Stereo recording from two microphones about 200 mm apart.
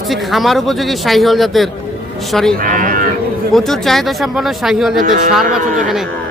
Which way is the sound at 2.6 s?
40° right (ahead or behind).